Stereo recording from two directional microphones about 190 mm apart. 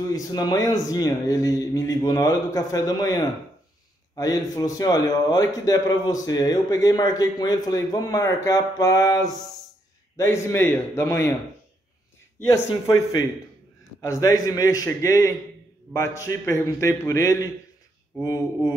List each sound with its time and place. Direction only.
0.1 s a man's voice: 20° left (ahead or behind)
12.4 s a man's voice: 20° left (ahead or behind)
14.0 s a man's voice: 15° left (ahead or behind)